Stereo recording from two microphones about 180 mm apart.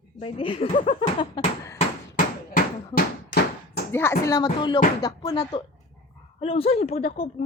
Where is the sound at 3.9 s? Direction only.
15° left (ahead or behind).